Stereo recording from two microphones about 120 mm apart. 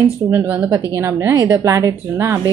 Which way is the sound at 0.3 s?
15° right (ahead or behind).